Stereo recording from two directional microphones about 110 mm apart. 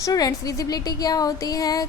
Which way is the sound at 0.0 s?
30° left (ahead or behind).